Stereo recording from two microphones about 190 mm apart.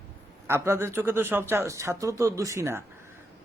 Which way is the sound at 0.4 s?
15° right (ahead or behind).